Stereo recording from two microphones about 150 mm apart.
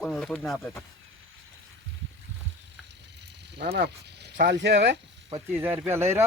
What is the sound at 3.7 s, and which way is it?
Speech, 90° right.